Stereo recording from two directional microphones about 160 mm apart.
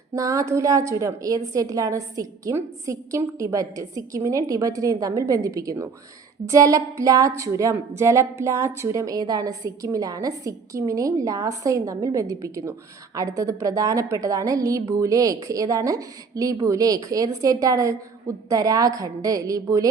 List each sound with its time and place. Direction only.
0.2 s speech: 20° right (ahead or behind)